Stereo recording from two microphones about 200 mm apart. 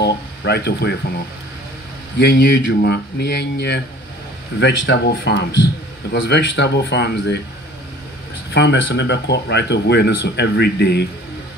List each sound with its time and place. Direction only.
0.0 s speech: 55° left (ahead or behind)
8.5 s speech: 60° left (ahead or behind)